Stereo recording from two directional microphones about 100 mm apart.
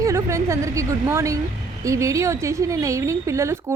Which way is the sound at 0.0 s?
30° right (ahead or behind).